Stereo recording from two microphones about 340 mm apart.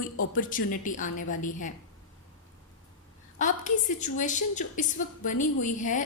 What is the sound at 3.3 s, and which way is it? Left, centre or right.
A woman's voice, left.